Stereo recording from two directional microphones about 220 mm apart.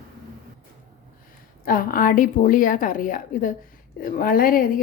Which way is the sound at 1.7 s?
40° left (ahead or behind).